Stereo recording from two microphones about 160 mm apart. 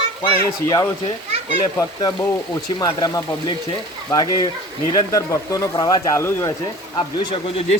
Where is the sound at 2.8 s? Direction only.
25° left (ahead or behind).